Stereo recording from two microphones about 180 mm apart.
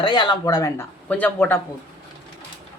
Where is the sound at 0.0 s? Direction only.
25° left (ahead or behind).